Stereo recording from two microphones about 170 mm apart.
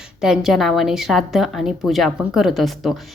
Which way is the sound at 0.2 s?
Centre (ahead or behind).